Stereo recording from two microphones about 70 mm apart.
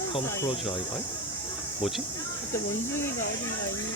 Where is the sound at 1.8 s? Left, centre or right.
Centre.